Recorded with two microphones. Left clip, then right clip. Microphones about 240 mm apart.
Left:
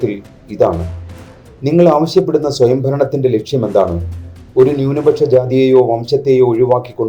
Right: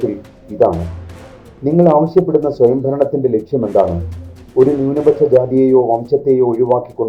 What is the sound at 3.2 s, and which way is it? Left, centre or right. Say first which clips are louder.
Speech: left 1 dB; centre.